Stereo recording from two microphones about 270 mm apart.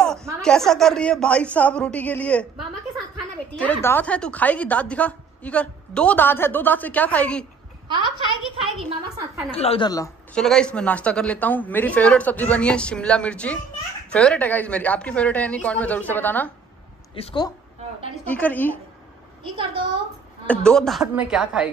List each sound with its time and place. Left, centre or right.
0.4 s a woman's voice: centre
3.5 s a woman's voice: centre
7.9 s a woman's voice: centre
9.5 s a woman's voice: left
17.1 s a woman's voice: centre
18.2 s a woman's voice: centre
19.4 s a woman's voice: centre
20.4 s a woman's voice: centre